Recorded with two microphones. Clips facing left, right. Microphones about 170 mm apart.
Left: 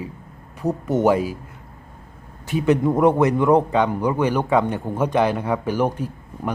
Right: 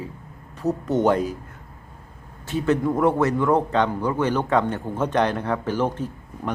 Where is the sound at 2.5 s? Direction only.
15° left (ahead or behind).